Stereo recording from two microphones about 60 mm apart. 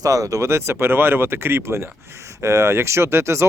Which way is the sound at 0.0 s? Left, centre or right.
Right.